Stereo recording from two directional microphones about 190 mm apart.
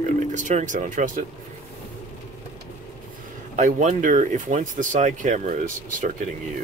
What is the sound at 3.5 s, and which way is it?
Speech, 40° right (ahead or behind).